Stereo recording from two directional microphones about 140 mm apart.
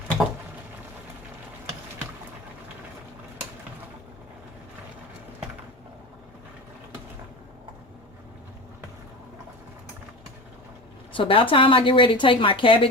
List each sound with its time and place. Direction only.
11.1 s a woman's voice: 40° left (ahead or behind)